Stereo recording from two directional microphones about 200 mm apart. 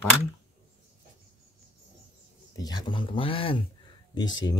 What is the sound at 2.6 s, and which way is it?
Speech, 20° left (ahead or behind).